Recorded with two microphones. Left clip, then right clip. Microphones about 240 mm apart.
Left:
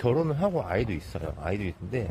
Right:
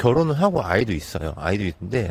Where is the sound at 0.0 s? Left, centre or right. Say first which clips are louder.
Right 7 dB; right.